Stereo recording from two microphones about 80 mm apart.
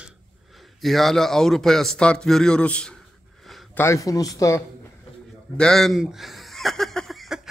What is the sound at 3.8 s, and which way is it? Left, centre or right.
Speech, left.